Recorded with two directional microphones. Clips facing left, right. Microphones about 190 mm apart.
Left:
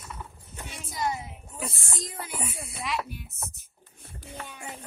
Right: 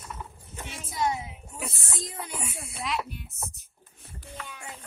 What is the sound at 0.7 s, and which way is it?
Speech, centre (ahead or behind).